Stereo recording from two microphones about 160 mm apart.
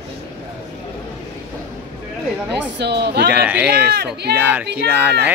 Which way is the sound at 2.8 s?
90° right.